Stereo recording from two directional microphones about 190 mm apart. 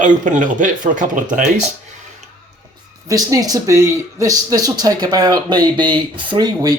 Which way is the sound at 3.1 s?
20° right (ahead or behind).